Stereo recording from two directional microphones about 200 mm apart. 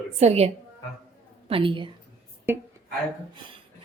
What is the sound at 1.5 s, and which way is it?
Speech, 25° right (ahead or behind).